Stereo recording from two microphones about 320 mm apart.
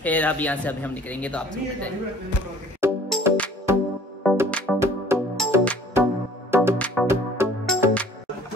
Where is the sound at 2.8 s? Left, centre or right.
Centre.